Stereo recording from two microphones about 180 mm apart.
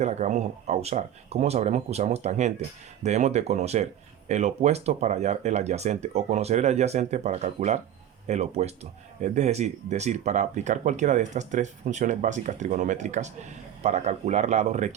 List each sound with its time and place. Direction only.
0.0 s speech: 40° right (ahead or behind)